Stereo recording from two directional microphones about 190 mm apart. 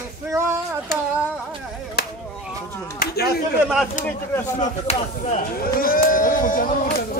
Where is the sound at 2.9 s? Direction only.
55° left (ahead or behind).